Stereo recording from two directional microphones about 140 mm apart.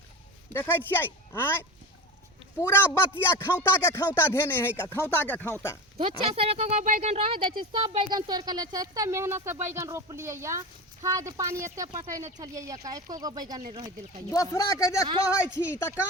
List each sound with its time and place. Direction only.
0.5 s speech: 15° left (ahead or behind)
6.0 s speech: 45° right (ahead or behind)
7.6 s speech: 35° right (ahead or behind)
13.6 s speech: 50° right (ahead or behind)
14.3 s speech: 25° left (ahead or behind)